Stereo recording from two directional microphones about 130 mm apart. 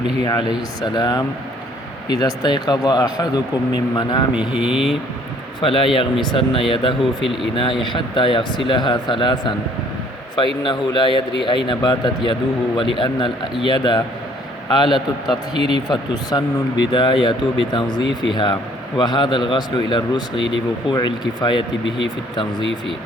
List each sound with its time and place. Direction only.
0.3 s speech: 30° left (ahead or behind)
4.4 s speech: 10° right (ahead or behind)
5.5 s a man's voice: 40° left (ahead or behind)
10.6 s speech: 40° left (ahead or behind)
15.5 s speech: 50° right (ahead or behind)
15.9 s speech: 30° left (ahead or behind)